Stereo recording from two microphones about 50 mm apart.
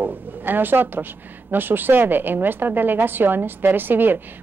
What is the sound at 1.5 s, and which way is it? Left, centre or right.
A woman's voice, right.